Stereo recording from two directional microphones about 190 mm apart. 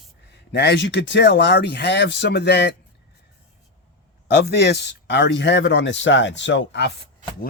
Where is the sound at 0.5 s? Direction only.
60° left (ahead or behind).